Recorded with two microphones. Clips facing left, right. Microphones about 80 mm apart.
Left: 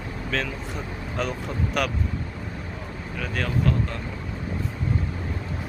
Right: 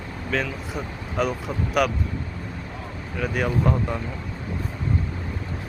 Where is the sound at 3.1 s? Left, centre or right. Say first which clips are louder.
Right 4 dB; centre.